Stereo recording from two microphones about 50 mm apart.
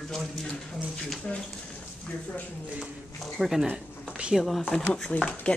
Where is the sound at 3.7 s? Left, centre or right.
Right.